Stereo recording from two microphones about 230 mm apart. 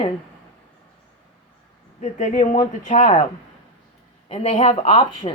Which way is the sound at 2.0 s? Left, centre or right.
Left.